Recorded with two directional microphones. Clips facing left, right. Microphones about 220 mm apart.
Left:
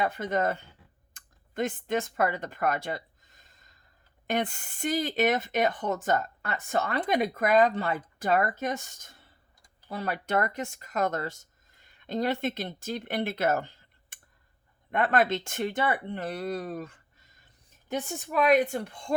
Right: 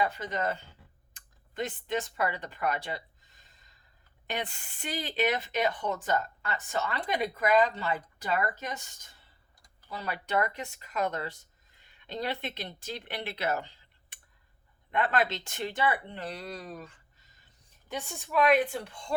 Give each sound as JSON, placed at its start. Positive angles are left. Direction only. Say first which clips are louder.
{"t": 0.0, "sound": "speech", "louder": "left 3 dB", "side_deg": 50}
{"t": 1.1, "sound": "a sound", "louder": "left 4 dB", "side_deg": 50}
{"t": 4.3, "sound": "speech", "louder": "left 7 dB", "side_deg": 50}
{"t": 18.3, "sound": "speech", "louder": "left 1 dB", "side_deg": 45}